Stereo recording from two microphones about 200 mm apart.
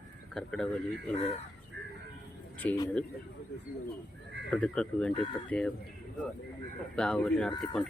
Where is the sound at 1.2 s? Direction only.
30° left (ahead or behind).